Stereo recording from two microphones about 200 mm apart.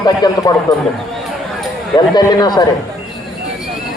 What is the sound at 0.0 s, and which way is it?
Speech, 20° left (ahead or behind).